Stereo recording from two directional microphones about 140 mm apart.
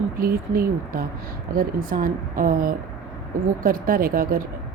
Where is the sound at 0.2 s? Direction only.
90° right.